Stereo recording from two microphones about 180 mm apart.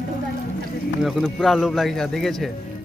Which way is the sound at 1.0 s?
Centre (ahead or behind).